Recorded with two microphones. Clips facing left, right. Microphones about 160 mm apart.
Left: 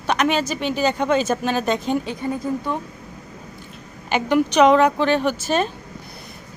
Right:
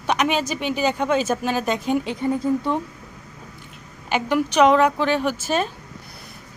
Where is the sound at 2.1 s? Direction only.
25° right (ahead or behind).